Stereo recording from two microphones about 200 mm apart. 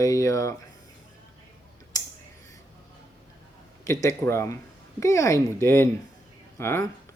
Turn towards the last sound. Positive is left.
turn(degrees=10)  # may be behind; listen again after turning